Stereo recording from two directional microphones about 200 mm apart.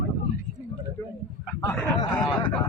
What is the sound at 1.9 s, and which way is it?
Speech, 25° left (ahead or behind).